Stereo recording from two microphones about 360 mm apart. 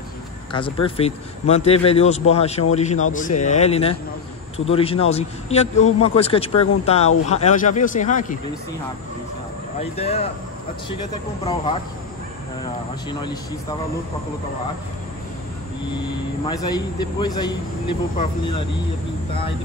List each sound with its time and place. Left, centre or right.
0.5 s a man's voice: centre
9.8 s a man's voice: centre
13.2 s a man's voice: centre
16.4 s a man's voice: centre